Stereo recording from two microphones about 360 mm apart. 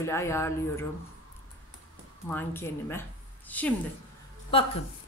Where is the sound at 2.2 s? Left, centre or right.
Centre.